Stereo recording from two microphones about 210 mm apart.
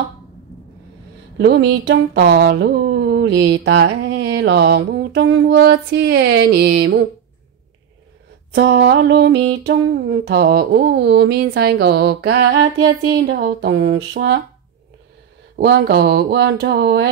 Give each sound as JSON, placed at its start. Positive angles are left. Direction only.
{"t": 1.4, "sound": "speech", "side_deg": -55}
{"t": 8.5, "sound": "mantra", "side_deg": -55}
{"t": 15.5, "sound": "mantra", "side_deg": -50}